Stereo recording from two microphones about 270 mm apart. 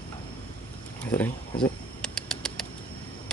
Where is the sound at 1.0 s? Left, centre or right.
Centre.